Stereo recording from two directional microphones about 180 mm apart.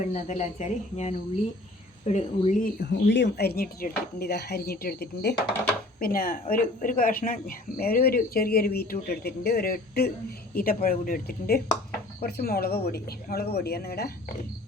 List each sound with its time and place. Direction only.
0.1 s speech: 40° left (ahead or behind)
3.1 s speech: 75° left (ahead or behind)